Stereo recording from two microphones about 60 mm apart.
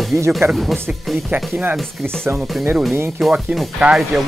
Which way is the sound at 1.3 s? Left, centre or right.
Right.